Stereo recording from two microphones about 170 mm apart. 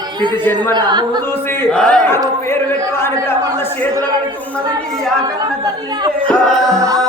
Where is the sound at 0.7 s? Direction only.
25° right (ahead or behind).